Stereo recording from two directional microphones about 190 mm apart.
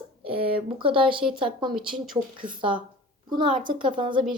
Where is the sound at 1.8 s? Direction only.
Centre (ahead or behind).